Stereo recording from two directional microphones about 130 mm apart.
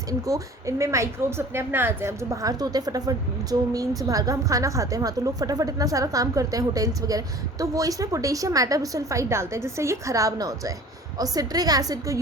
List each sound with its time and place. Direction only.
0.1 s a woman's voice: 25° right (ahead or behind)